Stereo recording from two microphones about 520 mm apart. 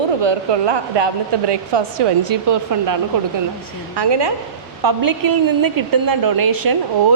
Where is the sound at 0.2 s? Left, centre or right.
Right.